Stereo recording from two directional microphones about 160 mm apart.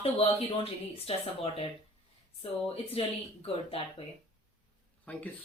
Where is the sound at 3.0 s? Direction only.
40° left (ahead or behind).